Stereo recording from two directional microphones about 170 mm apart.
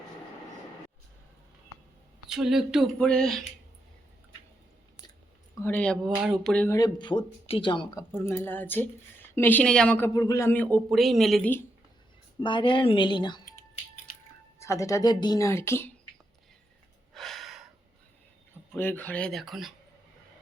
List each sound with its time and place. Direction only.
2.3 s speech: centre (ahead or behind)
5.5 s a woman's voice: 10° left (ahead or behind)
6.7 s speech: 20° left (ahead or behind)
8.1 s a woman's voice: 15° left (ahead or behind)
10.2 s a woman's voice: 20° left (ahead or behind)
10.9 s speech: centre (ahead or behind)
12.4 s speech: 30° left (ahead or behind)
14.6 s a woman's voice: 15° left (ahead or behind)
17.2 s gasp: centre (ahead or behind)
18.7 s a woman's voice: 10° left (ahead or behind)